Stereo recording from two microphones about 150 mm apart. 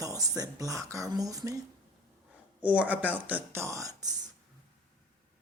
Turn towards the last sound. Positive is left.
turn(degrees=-25)  # may be behind; listen again after turning